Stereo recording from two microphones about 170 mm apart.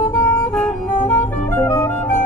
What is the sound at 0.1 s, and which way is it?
Music, 20° left (ahead or behind).